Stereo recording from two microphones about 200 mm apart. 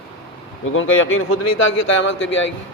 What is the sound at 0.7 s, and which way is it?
A man's voice, 80° left.